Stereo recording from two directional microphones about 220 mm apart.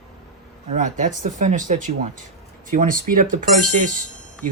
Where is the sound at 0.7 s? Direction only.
35° right (ahead or behind).